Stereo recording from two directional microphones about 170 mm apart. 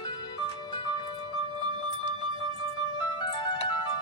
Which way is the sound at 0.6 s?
30° left (ahead or behind).